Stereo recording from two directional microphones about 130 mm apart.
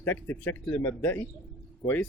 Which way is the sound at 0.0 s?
15° left (ahead or behind).